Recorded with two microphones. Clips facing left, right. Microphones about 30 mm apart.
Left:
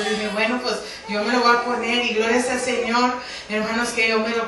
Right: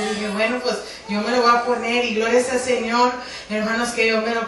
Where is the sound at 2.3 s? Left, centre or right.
Left.